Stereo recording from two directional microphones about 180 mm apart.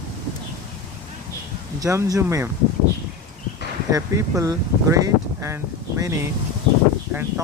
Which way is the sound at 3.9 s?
20° right (ahead or behind).